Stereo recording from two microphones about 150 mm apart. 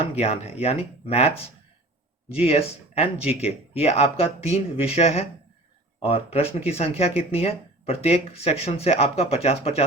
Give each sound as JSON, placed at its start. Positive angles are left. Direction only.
{"t": 0.2, "sound": "speech", "side_deg": 45}